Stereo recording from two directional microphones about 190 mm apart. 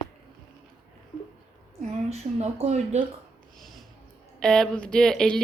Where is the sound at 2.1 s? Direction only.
35° right (ahead or behind).